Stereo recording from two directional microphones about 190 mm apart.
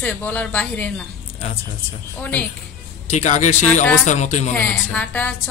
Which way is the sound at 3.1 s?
40° left (ahead or behind).